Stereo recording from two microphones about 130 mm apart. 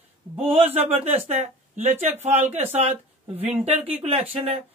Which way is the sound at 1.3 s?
55° right (ahead or behind).